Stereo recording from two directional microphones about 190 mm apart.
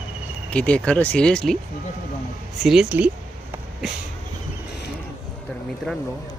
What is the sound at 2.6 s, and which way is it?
Speech, centre (ahead or behind).